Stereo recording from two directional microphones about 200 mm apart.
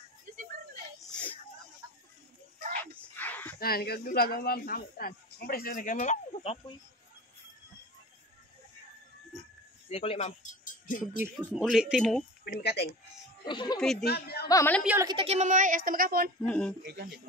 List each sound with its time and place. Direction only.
2.8 s music: 10° left (ahead or behind)
3.5 s speech: 50° left (ahead or behind); by 6.6 s 35° left (ahead or behind)
9.8 s speech: 30° left (ahead or behind)
11.5 s speech: centre (ahead or behind)
12.4 s speech: 55° left (ahead or behind)
13.5 s speech: 20° left (ahead or behind)
14.0 s speech: 50° left (ahead or behind)
14.5 s a woman's voice: 15° left (ahead or behind)
15.0 s a woman's voice: 25° right (ahead or behind); by 16.3 s 45° right (ahead or behind)
16.4 s speech: 5° left (ahead or behind)
16.8 s speech: 60° right (ahead or behind)